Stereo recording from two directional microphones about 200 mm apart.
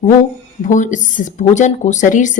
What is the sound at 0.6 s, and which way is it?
Speech, 40° left (ahead or behind).